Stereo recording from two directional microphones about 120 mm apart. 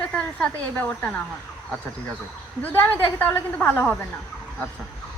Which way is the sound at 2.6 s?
15° left (ahead or behind).